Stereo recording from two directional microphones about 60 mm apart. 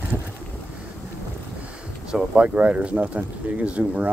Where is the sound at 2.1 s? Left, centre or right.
Right.